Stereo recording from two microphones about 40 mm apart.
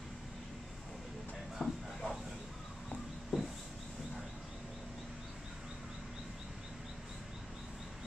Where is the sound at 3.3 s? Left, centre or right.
Centre.